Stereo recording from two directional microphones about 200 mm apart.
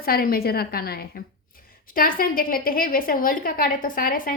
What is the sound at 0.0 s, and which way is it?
A woman's voice, 50° left (ahead or behind).